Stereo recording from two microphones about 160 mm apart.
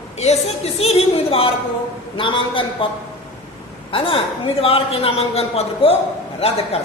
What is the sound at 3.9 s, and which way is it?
A man's voice, 35° left (ahead or behind).